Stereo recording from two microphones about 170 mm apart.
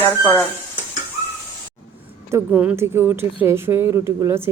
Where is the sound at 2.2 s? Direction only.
10° right (ahead or behind).